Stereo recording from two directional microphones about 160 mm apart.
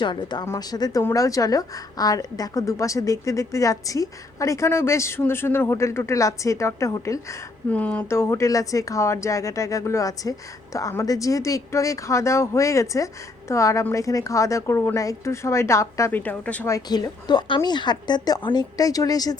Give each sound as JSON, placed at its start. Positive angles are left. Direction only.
{"t": 0.0, "sound": "a woman's voice", "side_deg": 30}
{"t": 16.7, "sound": "a woman's voice", "side_deg": 25}